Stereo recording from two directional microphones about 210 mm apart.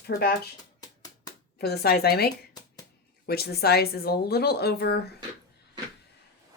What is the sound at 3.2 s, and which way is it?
Speech, 50° left (ahead or behind).